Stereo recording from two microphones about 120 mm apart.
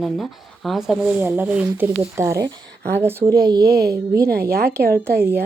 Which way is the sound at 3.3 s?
35° right (ahead or behind).